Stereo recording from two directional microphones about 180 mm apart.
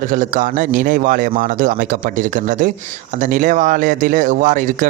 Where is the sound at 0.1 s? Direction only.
45° right (ahead or behind).